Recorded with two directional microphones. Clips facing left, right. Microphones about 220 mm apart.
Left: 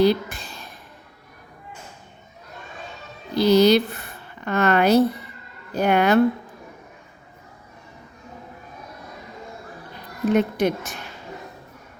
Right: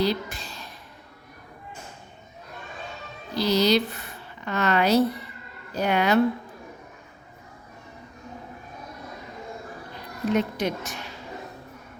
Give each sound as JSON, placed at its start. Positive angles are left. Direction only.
{"t": 0.0, "sound": "a sound", "side_deg": 55}
{"t": 3.3, "sound": "a woman's voice", "side_deg": 55}
{"t": 10.3, "sound": "a woman's voice", "side_deg": 55}